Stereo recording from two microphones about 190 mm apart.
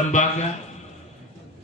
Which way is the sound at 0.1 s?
40° left (ahead or behind).